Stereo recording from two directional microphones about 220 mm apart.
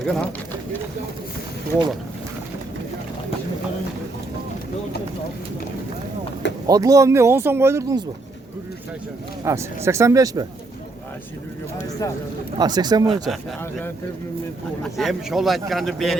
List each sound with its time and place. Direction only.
0.0 s speech: 5° left (ahead or behind)
6.7 s speech: 15° right (ahead or behind)
9.4 s speech: 15° right (ahead or behind)
12.5 s speech: 20° right (ahead or behind)
13.2 s a man's voice: centre (ahead or behind)
14.9 s a man's voice: centre (ahead or behind)